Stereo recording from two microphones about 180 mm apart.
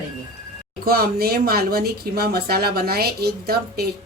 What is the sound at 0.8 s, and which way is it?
Speech, 55° right (ahead or behind).